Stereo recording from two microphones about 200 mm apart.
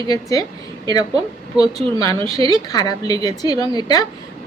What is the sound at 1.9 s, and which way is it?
A woman's voice, 20° left (ahead or behind).